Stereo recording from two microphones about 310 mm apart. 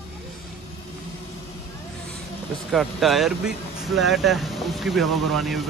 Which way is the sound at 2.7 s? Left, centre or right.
Centre.